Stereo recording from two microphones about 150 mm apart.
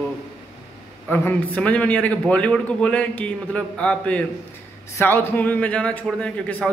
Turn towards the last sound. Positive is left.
turn(degrees=10)  # may be behind; listen again after turning